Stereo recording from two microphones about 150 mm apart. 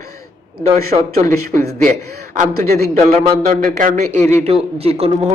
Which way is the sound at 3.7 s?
55° right (ahead or behind).